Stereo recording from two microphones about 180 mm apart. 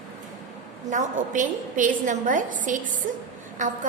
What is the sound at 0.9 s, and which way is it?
A woman's voice, 45° right (ahead or behind).